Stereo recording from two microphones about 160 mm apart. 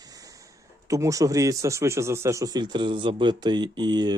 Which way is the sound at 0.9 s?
20° right (ahead or behind).